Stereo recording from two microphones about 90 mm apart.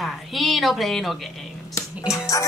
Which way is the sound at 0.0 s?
Centre (ahead or behind).